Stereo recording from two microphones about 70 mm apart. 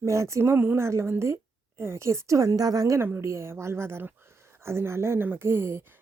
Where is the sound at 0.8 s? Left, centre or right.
Right.